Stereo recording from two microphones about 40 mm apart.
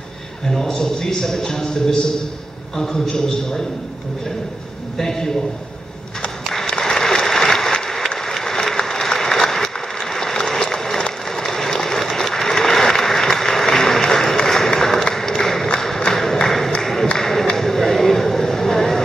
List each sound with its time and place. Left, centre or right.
0.5 s a man's voice: centre
4.9 s a man's voice: centre
6.8 s applause: centre
14.5 s a sound: centre